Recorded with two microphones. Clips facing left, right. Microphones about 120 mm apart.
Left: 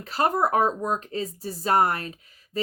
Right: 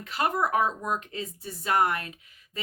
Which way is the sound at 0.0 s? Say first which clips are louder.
Left 4 dB; 35° left (ahead or behind).